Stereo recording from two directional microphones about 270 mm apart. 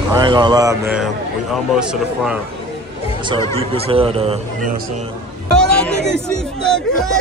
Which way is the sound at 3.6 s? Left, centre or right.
Right.